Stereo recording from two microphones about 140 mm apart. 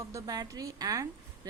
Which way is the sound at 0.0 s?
20° right (ahead or behind).